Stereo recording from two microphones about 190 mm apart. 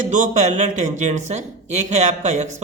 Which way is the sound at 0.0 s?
40° right (ahead or behind).